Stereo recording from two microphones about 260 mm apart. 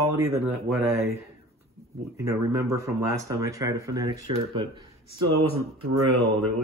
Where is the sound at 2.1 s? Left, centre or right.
Centre.